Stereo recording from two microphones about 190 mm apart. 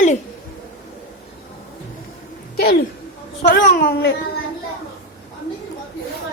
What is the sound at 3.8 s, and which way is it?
Speech, 55° left (ahead or behind).